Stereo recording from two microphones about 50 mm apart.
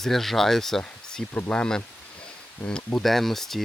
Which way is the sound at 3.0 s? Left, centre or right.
Centre.